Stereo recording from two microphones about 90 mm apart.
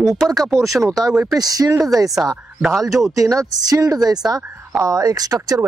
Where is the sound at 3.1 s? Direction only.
40° right (ahead or behind).